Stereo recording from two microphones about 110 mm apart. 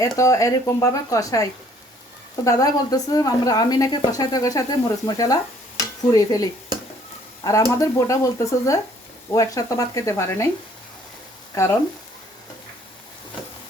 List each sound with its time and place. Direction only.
0.0 s a woman's voice: 30° left (ahead or behind)
11.5 s speech: 25° left (ahead or behind)